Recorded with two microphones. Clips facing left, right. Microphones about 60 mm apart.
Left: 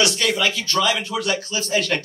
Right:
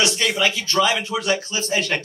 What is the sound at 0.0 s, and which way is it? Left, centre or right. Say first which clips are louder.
Speech: even; right.